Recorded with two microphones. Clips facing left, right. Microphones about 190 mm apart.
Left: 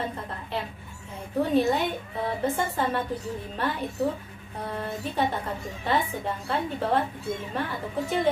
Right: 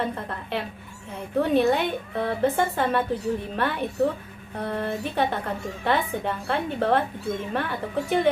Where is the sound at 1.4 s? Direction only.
65° right (ahead or behind).